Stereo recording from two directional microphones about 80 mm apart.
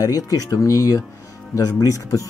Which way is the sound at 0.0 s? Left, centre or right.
Left.